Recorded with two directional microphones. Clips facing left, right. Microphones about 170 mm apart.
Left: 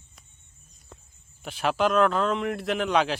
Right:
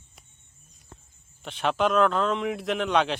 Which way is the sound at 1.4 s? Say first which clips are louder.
Even; 5° left (ahead or behind).